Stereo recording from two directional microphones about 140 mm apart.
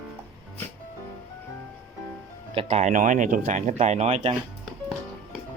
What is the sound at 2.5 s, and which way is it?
Speech, 45° right (ahead or behind).